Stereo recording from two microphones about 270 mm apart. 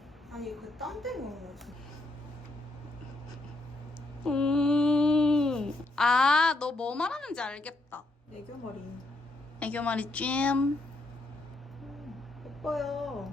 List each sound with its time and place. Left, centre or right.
0.3 s a woman's voice: centre
4.3 s a sound: centre
9.6 s a woman's voice: centre
12.6 s a woman's voice: centre